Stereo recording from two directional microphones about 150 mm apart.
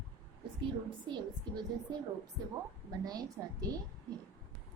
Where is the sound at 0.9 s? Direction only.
30° right (ahead or behind).